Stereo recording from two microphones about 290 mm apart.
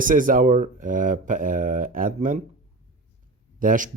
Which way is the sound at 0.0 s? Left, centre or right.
Right.